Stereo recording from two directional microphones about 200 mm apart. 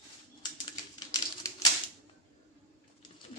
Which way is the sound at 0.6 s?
20° left (ahead or behind).